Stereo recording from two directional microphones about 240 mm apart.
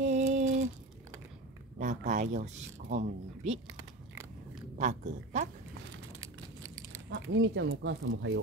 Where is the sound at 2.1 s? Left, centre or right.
Right.